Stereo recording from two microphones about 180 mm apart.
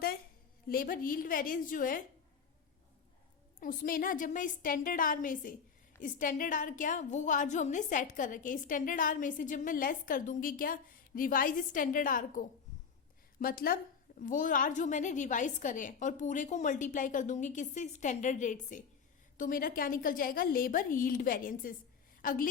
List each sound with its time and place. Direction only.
0.7 s a woman's voice: 50° left (ahead or behind)
3.6 s a woman's voice: 50° left (ahead or behind)